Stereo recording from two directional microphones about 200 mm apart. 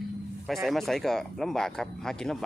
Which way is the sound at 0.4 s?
Centre (ahead or behind).